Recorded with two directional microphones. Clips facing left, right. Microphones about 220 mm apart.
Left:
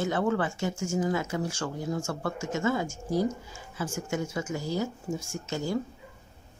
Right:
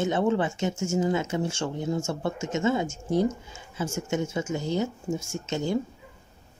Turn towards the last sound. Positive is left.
turn(degrees=-20)  # may be behind; listen again after turning